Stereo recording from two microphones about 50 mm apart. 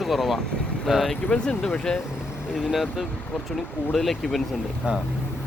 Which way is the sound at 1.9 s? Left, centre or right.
Centre.